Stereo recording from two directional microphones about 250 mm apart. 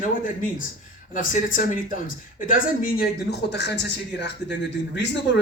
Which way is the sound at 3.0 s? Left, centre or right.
Left.